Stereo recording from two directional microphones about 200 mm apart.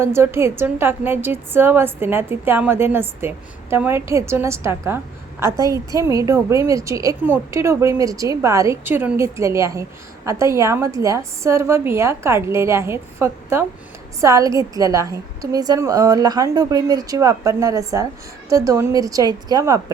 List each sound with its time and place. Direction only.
0.0 s a woman's voice: 10° right (ahead or behind)